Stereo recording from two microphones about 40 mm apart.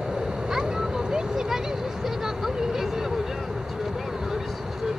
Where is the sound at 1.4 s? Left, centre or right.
Centre.